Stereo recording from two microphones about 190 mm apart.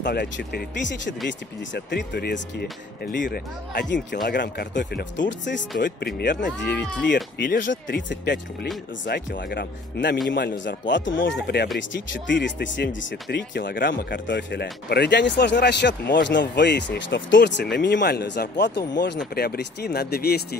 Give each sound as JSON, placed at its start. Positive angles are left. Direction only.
{"t": 0.0, "sound": "speech", "side_deg": 60}
{"t": 5.8, "sound": "speech", "side_deg": 50}
{"t": 6.8, "sound": "speech", "side_deg": 5}
{"t": 7.4, "sound": "speech", "side_deg": 45}
{"t": 7.7, "sound": "speech", "side_deg": 65}
{"t": 11.4, "sound": "speech", "side_deg": 60}
{"t": 11.9, "sound": "speech", "side_deg": 70}
{"t": 14.2, "sound": "speech", "side_deg": 65}
{"t": 19.3, "sound": "speech", "side_deg": 55}